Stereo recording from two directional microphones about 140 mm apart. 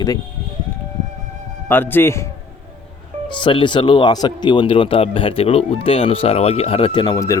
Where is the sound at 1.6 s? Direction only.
15° left (ahead or behind).